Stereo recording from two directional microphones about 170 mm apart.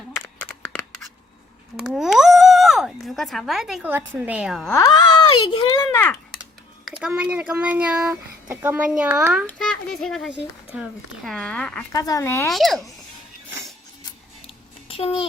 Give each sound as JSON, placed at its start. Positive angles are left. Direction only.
{"t": 1.7, "sound": "speech", "side_deg": 0}
{"t": 4.7, "sound": "a child's voice", "side_deg": 20}
{"t": 7.1, "sound": "a child's voice", "side_deg": -5}
{"t": 11.9, "sound": "a child's voice", "side_deg": 20}
{"t": 12.5, "sound": "speech", "side_deg": 0}
{"t": 14.0, "sound": "scissors", "side_deg": 30}